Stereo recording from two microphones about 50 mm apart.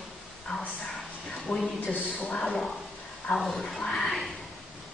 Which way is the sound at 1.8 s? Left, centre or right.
Left.